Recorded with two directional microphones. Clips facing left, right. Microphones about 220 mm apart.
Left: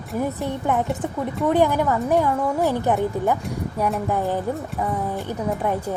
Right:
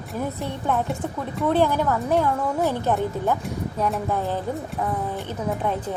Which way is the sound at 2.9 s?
15° left (ahead or behind).